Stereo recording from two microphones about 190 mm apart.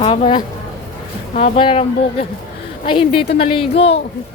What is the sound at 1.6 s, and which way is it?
A woman's voice, 30° left (ahead or behind).